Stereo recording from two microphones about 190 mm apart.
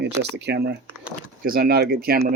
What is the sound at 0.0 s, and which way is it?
Speech, 65° right (ahead or behind).